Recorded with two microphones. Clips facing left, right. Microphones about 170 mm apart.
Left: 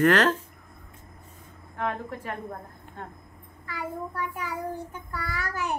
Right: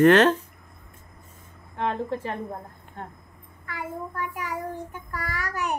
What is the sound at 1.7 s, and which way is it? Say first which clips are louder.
Speech: right 4 dB; 30° right (ahead or behind).